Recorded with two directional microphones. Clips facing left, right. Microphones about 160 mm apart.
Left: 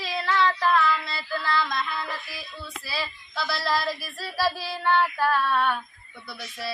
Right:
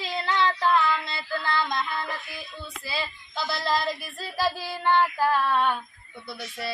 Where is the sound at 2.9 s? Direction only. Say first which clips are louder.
Right 1 dB; 20° right (ahead or behind).